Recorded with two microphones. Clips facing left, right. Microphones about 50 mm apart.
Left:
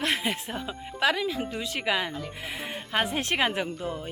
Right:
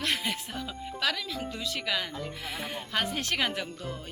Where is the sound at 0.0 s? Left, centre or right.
Left.